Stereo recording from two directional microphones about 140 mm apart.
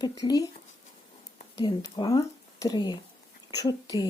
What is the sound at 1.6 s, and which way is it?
Speech, 30° left (ahead or behind).